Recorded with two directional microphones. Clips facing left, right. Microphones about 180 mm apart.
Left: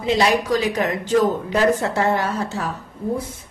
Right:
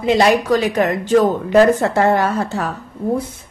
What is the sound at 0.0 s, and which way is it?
Speech, 55° right (ahead or behind).